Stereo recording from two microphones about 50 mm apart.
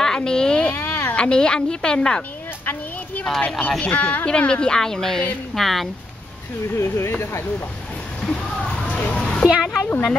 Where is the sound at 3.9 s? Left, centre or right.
Left; by 5.8 s centre.